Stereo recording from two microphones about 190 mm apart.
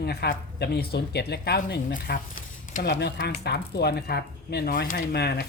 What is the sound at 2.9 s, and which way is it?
Speech, 65° left (ahead or behind).